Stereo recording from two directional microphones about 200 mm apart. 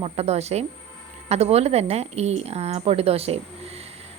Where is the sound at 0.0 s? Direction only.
30° right (ahead or behind).